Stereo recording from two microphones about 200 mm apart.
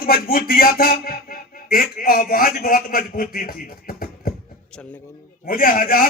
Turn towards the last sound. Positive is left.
turn(degrees=45)  # may be behind; listen again after turning